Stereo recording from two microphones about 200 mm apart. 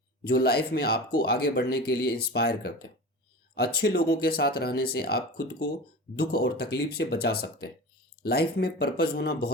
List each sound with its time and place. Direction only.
0.3 s speech: 50° left (ahead or behind)